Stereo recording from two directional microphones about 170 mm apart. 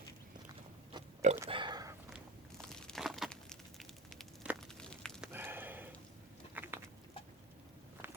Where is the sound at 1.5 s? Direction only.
30° right (ahead or behind).